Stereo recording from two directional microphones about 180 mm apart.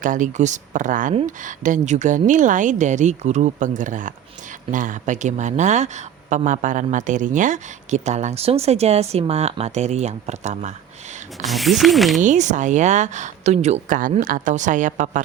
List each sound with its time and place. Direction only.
0.0 s a woman's voice: 45° right (ahead or behind)
11.4 s speech: centre (ahead or behind)
12.2 s a woman's voice: 40° right (ahead or behind)